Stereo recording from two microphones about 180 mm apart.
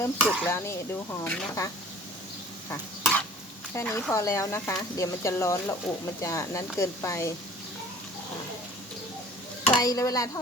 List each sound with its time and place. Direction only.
0.0 s speech: 15° left (ahead or behind)
2.6 s stir: 5° left (ahead or behind)
3.8 s speech: 15° left (ahead or behind)
9.8 s a sound: 20° left (ahead or behind)